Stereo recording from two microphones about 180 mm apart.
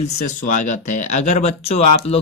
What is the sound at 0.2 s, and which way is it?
A man's voice, 45° left (ahead or behind).